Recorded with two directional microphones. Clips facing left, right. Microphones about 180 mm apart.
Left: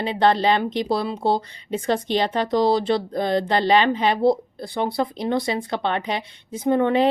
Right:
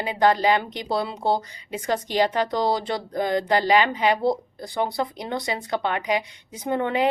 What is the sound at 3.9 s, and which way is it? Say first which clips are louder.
Speech: left 3 dB; 25° left (ahead or behind).